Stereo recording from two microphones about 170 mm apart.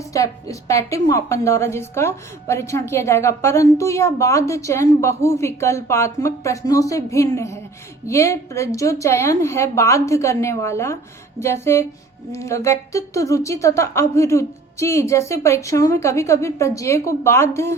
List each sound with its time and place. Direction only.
0.1 s a woman's voice: 20° left (ahead or behind)